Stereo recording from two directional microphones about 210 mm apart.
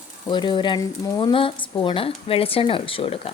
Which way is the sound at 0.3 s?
20° left (ahead or behind).